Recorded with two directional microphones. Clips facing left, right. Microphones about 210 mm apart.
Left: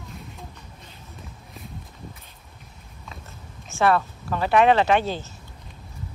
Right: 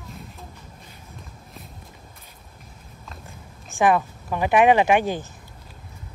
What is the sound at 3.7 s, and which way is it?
Speech, 15° right (ahead or behind).